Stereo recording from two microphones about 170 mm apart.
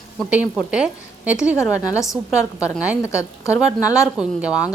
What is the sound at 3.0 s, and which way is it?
Speech, 15° left (ahead or behind).